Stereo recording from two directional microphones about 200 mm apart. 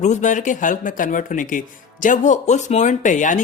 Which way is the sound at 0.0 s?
35° left (ahead or behind).